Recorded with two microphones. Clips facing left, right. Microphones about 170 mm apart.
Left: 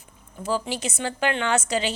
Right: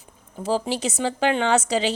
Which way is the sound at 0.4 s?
35° right (ahead or behind).